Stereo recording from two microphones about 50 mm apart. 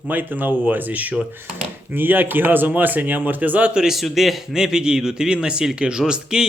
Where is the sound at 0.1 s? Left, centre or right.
Right.